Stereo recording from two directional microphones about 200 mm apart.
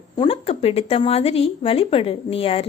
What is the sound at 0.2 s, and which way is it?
Speech, 30° left (ahead or behind).